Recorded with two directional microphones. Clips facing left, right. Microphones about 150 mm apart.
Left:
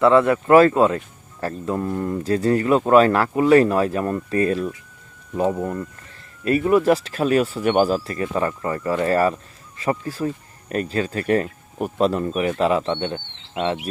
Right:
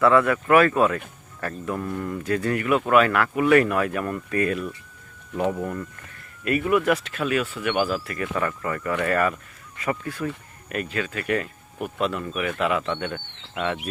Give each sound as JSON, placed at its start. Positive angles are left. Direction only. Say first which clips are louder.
{"t": 0.0, "sound": "speech", "louder": "left 3 dB", "side_deg": 25}
{"t": 5.5, "sound": "speech", "louder": "left 3 dB", "side_deg": 20}
{"t": 6.4, "sound": "speech", "louder": "left 4 dB", "side_deg": 30}